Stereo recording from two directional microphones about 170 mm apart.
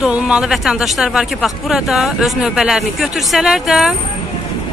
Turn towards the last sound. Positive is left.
turn(degrees=0)  # may be behind; listen again after turning